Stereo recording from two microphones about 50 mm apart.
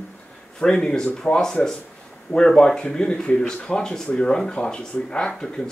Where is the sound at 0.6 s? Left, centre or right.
Centre.